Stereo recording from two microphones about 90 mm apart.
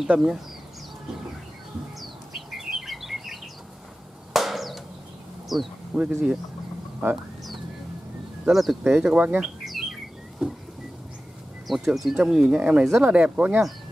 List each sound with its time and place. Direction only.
0.0 s speech: 10° right (ahead or behind)
2.0 s bird: 5° right (ahead or behind)
4.3 s drum: centre (ahead or behind)
5.5 s speech: centre (ahead or behind)
5.9 s speech: 10° right (ahead or behind)
8.5 s speech: 5° right (ahead or behind)
9.4 s bird: 5° right (ahead or behind)
11.6 s speech: centre (ahead or behind)